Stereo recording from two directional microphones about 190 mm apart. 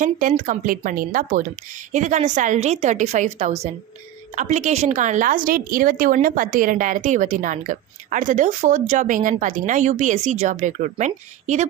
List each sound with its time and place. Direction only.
0.0 s a woman's voice: 45° right (ahead or behind)